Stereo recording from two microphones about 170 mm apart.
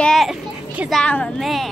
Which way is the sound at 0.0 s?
Centre (ahead or behind).